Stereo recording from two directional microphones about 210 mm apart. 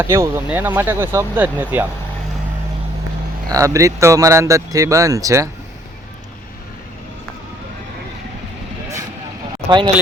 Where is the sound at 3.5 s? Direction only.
15° right (ahead or behind).